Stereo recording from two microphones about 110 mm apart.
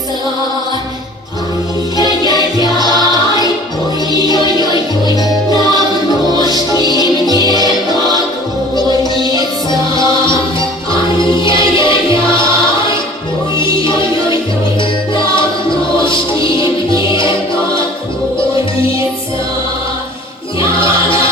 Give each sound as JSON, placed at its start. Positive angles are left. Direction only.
{"t": 2.0, "sound": "music", "side_deg": 40}
{"t": 8.9, "sound": "music", "side_deg": -35}
{"t": 9.9, "sound": "music", "side_deg": 45}
{"t": 13.6, "sound": "music", "side_deg": 45}
{"t": 20.6, "sound": "music", "side_deg": 50}